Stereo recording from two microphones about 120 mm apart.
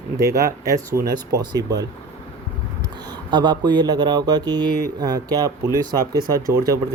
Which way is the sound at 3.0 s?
35° right (ahead or behind).